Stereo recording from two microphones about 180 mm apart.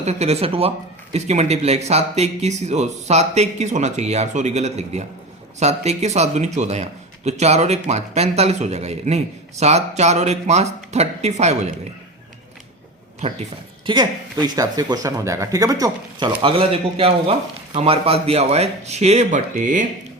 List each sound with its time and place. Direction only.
0.0 s speech: 35° right (ahead or behind)
13.8 s speech: 25° right (ahead or behind); by 19.8 s 45° right (ahead or behind)